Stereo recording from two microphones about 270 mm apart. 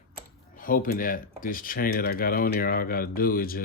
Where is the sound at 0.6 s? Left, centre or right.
Left.